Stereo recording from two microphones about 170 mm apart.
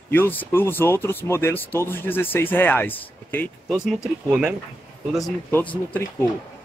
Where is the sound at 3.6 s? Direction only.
5° right (ahead or behind).